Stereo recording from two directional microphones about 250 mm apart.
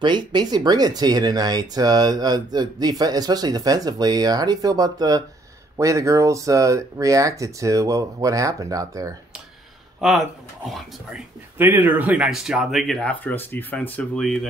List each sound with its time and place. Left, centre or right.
0.0 s speech: centre
9.9 s speech: centre